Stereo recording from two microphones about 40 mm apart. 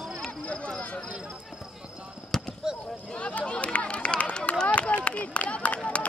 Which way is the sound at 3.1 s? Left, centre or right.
Left.